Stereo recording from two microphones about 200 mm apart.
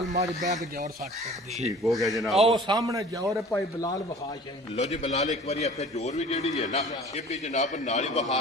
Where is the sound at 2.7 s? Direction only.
20° right (ahead or behind).